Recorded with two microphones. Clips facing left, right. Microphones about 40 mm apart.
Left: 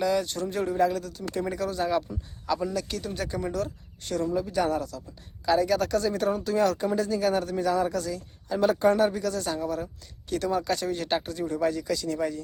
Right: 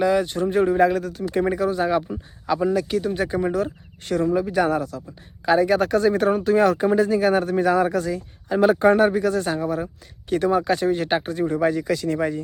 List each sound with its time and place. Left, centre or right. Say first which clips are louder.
0.0 s speech: right 6 dB; right
0.7 s speech: right 7 dB; right
1.5 s speech: right 6 dB; right
4.0 s speech: right 7 dB; right